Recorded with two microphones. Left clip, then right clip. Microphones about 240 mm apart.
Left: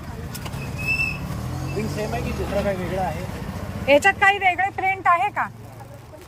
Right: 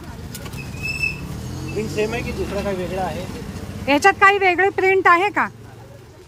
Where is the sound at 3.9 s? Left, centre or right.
Centre.